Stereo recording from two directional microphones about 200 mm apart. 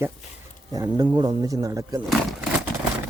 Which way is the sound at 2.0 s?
Centre (ahead or behind).